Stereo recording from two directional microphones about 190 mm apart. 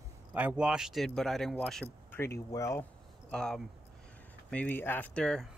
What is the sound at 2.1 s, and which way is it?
Speech, 15° left (ahead or behind).